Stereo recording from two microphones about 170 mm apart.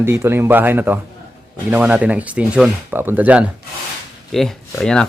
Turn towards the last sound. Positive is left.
turn(degrees=5)  # may be behind; listen again after turning